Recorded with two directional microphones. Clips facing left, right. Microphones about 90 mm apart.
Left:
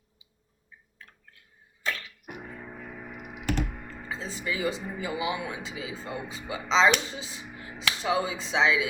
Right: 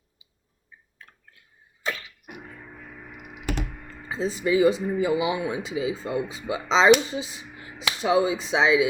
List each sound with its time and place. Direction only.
1.8 s a sound: 15° right (ahead or behind)
2.6 s music: 10° left (ahead or behind)
3.4 s computer keyboard: 5° right (ahead or behind)
4.1 s speech: 15° right (ahead or behind)